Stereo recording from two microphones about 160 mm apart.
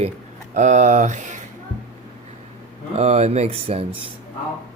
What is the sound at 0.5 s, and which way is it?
Speech, 50° right (ahead or behind).